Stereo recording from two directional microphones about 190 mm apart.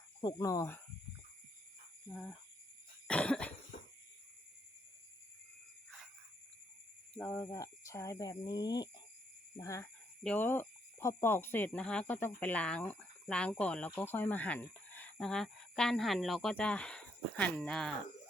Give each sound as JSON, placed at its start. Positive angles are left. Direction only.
{"t": 0.2, "sound": "speech", "side_deg": 20}
{"t": 2.0, "sound": "speech", "side_deg": 5}
{"t": 3.1, "sound": "cough", "side_deg": 5}
{"t": 7.1, "sound": "speech", "side_deg": 10}